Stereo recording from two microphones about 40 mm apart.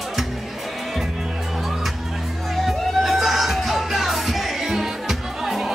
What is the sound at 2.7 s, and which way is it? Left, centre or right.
Music, centre.